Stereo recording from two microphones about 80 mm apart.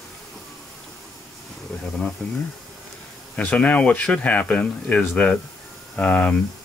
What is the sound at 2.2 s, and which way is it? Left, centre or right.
Speech, centre.